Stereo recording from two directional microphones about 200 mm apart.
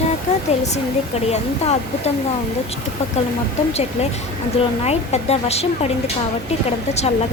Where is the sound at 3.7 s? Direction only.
30° left (ahead or behind).